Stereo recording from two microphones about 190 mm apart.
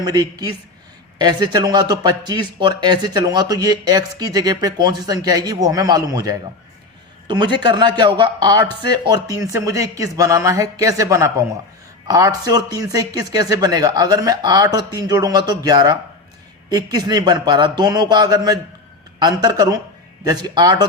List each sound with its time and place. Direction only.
0.0 s a man's voice: 20° right (ahead or behind)